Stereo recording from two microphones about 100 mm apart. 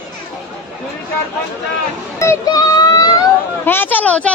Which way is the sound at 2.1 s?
30° left (ahead or behind).